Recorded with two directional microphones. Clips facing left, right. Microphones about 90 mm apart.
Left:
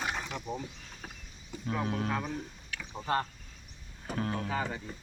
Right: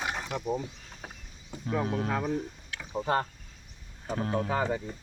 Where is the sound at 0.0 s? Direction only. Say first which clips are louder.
Right 1 dB; 10° right (ahead or behind).